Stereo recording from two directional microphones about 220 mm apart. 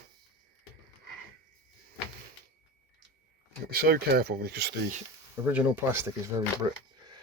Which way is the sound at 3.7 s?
45° right (ahead or behind).